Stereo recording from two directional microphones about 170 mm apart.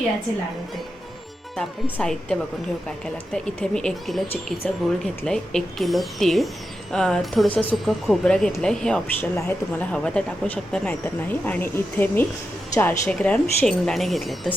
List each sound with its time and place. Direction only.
1.5 s speech: 5° left (ahead or behind)